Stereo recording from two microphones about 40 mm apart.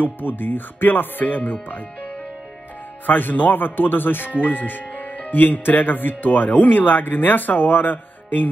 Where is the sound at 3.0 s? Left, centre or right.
Left.